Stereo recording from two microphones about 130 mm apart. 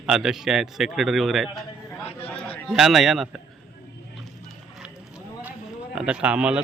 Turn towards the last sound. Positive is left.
turn(degrees=-10)  # may be behind; listen again after turning